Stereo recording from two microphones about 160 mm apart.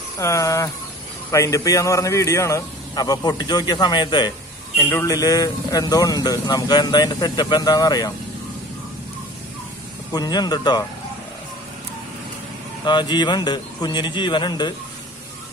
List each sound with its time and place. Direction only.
0.2 s a man's voice: 20° left (ahead or behind)
4.8 s a man's voice: 15° left (ahead or behind)
10.1 s a man's voice: 25° left (ahead or behind)
12.8 s a man's voice: 25° left (ahead or behind)